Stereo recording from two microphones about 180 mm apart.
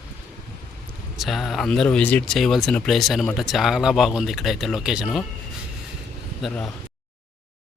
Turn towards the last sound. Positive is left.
turn(degrees=0)  # may be behind; listen again after turning